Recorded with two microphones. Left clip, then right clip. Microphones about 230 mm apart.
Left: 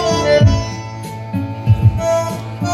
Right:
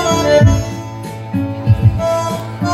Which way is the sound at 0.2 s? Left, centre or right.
Left.